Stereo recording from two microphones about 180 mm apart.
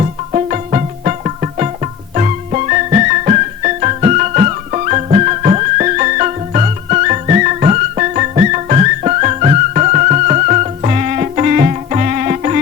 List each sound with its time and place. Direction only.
0.0 s music: 40° right (ahead or behind)